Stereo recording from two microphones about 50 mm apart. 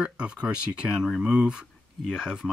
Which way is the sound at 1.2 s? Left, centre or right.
Centre.